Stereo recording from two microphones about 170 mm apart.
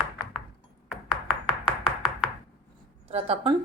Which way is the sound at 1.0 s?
25° left (ahead or behind).